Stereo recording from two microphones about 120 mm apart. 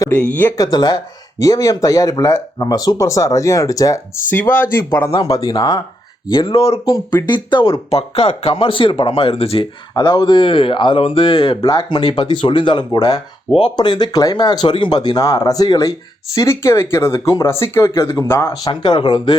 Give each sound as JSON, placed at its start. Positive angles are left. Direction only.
{"t": 0.1, "sound": "speech", "side_deg": 10}
{"t": 0.5, "sound": "speech", "side_deg": 30}
{"t": 4.3, "sound": "speech", "side_deg": 15}
{"t": 5.3, "sound": "speech", "side_deg": 40}
{"t": 6.3, "sound": "speech", "side_deg": 55}
{"t": 7.3, "sound": "speech", "side_deg": 40}
{"t": 10.0, "sound": "speech", "side_deg": 30}
{"t": 11.9, "sound": "speech", "side_deg": 40}
{"t": 18.7, "sound": "speech", "side_deg": 40}